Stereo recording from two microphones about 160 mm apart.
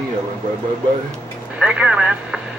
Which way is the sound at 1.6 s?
5° right (ahead or behind).